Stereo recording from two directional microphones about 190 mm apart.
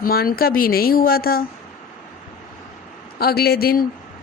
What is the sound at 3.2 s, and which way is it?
Speech, 55° left (ahead or behind).